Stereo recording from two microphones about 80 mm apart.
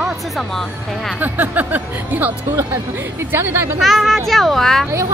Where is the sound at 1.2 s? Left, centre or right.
Right.